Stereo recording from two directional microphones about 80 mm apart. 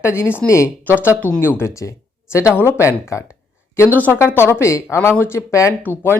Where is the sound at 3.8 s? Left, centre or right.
Left.